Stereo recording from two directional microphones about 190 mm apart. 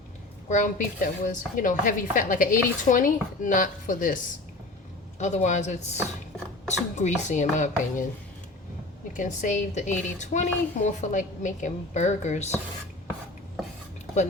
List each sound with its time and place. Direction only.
0.4 s a woman's voice: 40° left (ahead or behind)
5.2 s a woman's voice: 40° left (ahead or behind)
9.1 s a woman's voice: 40° left (ahead or behind)